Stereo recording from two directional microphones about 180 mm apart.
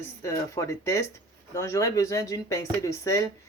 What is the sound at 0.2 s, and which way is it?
Speech, 15° left (ahead or behind).